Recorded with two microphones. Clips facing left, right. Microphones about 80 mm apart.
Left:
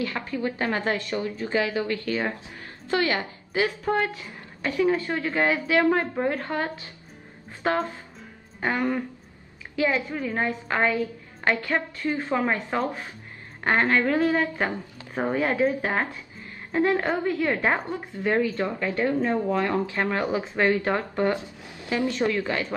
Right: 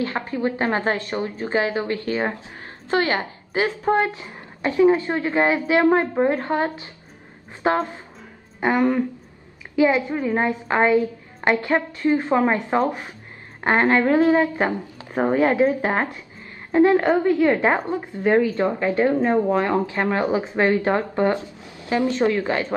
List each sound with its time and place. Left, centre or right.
0.0 s a woman's voice: right